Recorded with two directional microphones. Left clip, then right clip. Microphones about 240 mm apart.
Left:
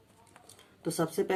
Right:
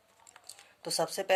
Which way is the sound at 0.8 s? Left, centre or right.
Right.